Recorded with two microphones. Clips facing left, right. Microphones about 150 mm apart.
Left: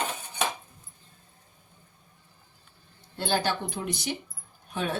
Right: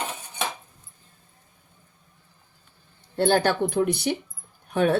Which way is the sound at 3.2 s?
60° right (ahead or behind).